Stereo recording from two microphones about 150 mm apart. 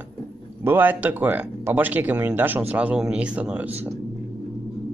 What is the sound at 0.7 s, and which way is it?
Speech, 10° right (ahead or behind).